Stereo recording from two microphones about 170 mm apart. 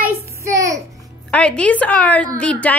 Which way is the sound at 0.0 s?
15° right (ahead or behind).